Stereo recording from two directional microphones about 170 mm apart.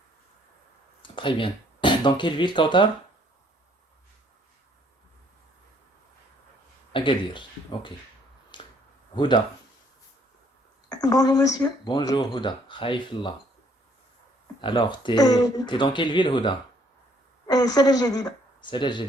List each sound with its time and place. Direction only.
1.0 s speech: 30° left (ahead or behind)
6.9 s speech: 30° left (ahead or behind)
8.5 s a sound: 25° left (ahead or behind)
9.1 s speech: 25° left (ahead or behind)
10.9 s speech: 20° left (ahead or behind)
14.6 s speech: 30° left (ahead or behind)